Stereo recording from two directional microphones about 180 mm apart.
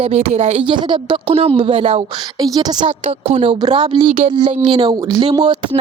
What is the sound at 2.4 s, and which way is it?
A woman's voice, 20° right (ahead or behind).